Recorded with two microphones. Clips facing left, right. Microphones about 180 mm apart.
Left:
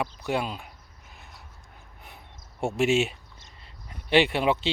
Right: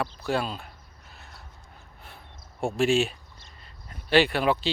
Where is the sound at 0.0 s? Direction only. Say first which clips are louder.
Even; 20° left (ahead or behind).